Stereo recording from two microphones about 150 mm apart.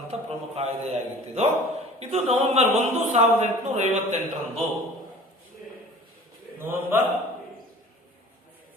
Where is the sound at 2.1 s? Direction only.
45° right (ahead or behind).